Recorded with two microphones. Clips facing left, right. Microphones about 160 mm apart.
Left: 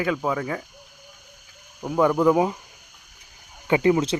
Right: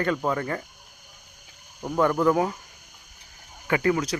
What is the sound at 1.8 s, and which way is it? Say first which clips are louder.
Speech: left 3 dB; 10° left (ahead or behind).